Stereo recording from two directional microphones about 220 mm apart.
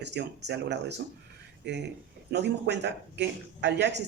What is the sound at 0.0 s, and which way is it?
Speech, 50° right (ahead or behind).